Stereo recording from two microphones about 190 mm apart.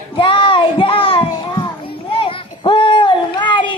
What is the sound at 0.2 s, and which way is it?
Child singing, 25° left (ahead or behind).